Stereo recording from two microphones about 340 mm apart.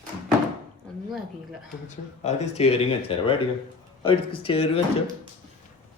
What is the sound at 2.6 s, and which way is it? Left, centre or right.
Speech, centre.